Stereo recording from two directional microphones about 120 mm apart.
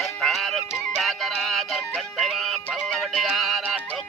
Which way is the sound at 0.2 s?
Centre (ahead or behind).